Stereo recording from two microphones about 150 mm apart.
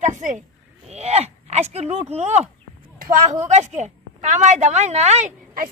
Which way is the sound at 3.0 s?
65° right (ahead or behind).